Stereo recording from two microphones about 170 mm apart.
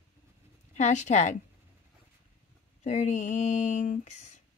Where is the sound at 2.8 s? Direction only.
40° left (ahead or behind).